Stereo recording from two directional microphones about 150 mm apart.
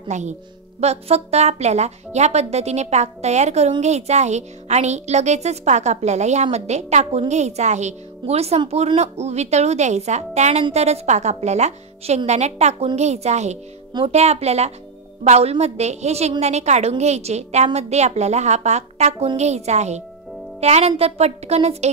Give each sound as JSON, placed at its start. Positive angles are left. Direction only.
{"t": 0.1, "sound": "a woman's voice", "side_deg": -50}